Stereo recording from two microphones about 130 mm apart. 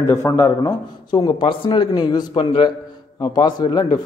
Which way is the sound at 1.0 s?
35° left (ahead or behind).